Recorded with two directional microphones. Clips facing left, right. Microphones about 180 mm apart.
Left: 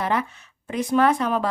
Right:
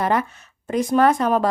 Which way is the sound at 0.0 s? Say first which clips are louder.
Right 3 dB; 45° right (ahead or behind).